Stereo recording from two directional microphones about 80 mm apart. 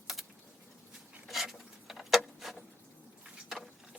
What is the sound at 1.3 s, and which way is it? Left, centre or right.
Wood, centre.